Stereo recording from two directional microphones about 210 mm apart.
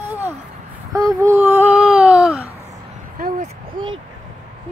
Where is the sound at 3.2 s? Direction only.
45° right (ahead or behind).